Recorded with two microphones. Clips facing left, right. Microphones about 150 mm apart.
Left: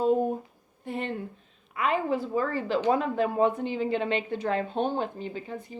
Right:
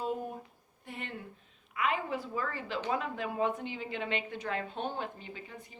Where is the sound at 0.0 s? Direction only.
30° left (ahead or behind).